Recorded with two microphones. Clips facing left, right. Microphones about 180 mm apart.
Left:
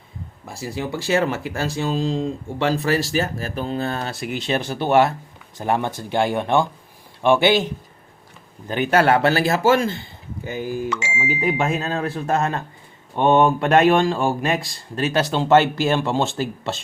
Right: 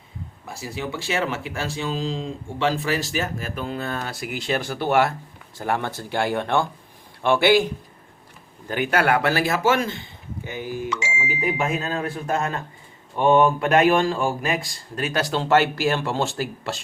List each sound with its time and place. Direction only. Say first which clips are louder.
0.8 s speech: left 5 dB; 40° left (ahead or behind)
10.4 s speech: left 4 dB; 45° left (ahead or behind)
11.4 s speech: left 2 dB; 40° left (ahead or behind)
13.1 s speech: left 1 dB; 25° left (ahead or behind)